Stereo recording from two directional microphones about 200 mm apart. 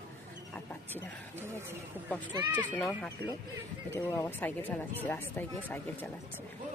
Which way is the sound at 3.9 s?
10° left (ahead or behind).